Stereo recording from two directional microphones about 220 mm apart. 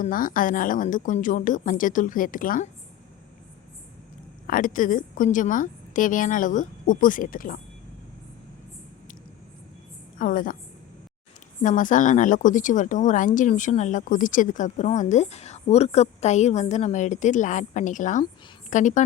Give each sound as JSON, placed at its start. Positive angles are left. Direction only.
{"t": 0.0, "sound": "a woman's voice", "side_deg": 40}
{"t": 4.4, "sound": "a woman's voice", "side_deg": 40}
{"t": 10.2, "sound": "a woman's voice", "side_deg": 40}
{"t": 11.6, "sound": "a woman's voice", "side_deg": 35}